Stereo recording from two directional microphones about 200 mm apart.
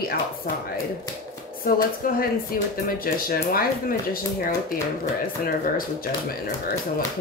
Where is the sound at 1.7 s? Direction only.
45° left (ahead or behind).